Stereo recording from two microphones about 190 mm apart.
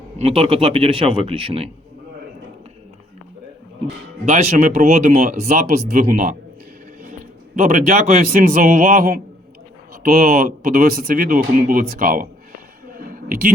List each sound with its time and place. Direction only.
0.2 s speech: 30° right (ahead or behind)
4.3 s a man's voice: 40° right (ahead or behind)
13.1 s a sound: 45° right (ahead or behind)